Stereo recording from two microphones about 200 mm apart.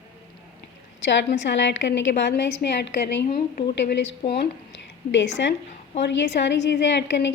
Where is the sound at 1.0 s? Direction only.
60° left (ahead or behind).